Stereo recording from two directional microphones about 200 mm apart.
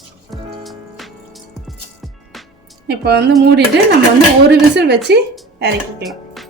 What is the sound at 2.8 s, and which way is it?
Speech, 55° right (ahead or behind).